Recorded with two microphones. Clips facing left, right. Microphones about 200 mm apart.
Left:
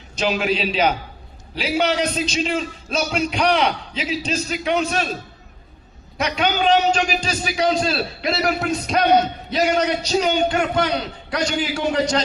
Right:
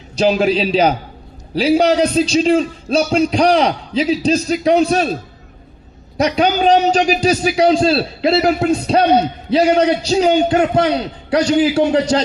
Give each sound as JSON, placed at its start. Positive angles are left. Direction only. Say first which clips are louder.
{"t": 0.2, "sound": "a man's voice", "louder": "right 7 dB", "side_deg": -35}
{"t": 6.1, "sound": "a man's voice", "louder": "right 6 dB", "side_deg": -35}